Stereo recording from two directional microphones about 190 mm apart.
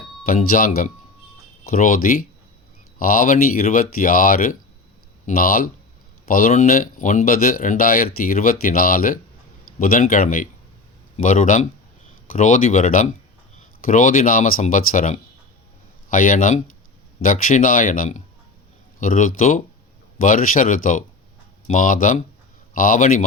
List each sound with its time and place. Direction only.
0.3 s speech: 45° left (ahead or behind)